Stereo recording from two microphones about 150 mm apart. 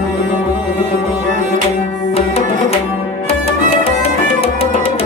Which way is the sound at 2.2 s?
40° left (ahead or behind).